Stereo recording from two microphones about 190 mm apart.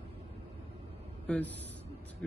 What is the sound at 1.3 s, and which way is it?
Speech, 5° left (ahead or behind).